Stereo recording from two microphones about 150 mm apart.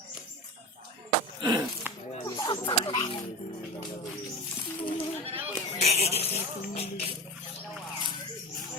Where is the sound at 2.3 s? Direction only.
30° left (ahead or behind).